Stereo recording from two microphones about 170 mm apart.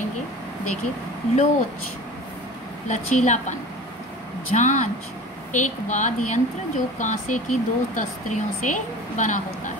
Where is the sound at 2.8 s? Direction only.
45° left (ahead or behind).